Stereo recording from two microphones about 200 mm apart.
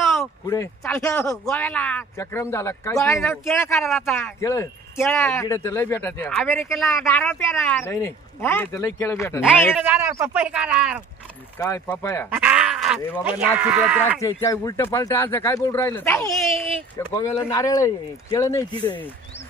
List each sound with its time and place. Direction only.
0.5 s speech: 15° left (ahead or behind)
3.2 s speech: centre (ahead or behind)
3.6 s speech: 15° left (ahead or behind)
3.9 s speech: centre (ahead or behind)
4.4 s speech: 15° left (ahead or behind)
9.8 s speech: 10° right (ahead or behind)
11.5 s speech: 10° left (ahead or behind)
12.3 s groan: 5° right (ahead or behind)
13.2 s speech: 10° right (ahead or behind)
14.2 s speech: 15° left (ahead or behind)